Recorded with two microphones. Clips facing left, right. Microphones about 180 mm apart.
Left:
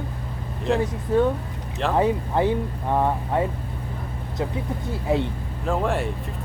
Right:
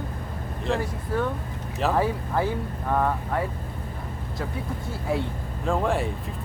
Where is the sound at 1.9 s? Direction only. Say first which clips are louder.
Left 7 dB; 20° left (ahead or behind).